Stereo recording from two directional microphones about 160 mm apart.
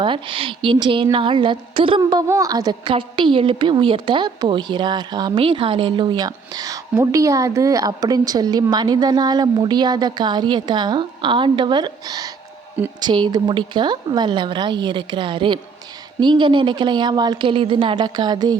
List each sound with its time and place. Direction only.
0.0 s a woman's voice: 30° right (ahead or behind)